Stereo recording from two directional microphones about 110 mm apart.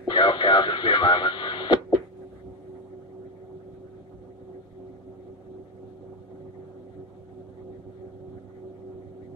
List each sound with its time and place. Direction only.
0.0 s radio: 45° left (ahead or behind)